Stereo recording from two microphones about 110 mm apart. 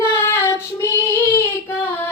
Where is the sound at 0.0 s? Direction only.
25° left (ahead or behind).